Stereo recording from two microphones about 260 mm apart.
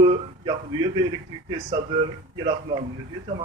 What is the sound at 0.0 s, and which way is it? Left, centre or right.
Speech, centre.